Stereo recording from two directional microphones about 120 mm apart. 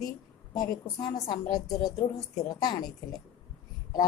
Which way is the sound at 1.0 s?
35° left (ahead or behind).